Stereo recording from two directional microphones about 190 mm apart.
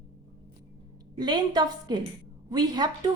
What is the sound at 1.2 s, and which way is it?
A woman's voice, 20° right (ahead or behind).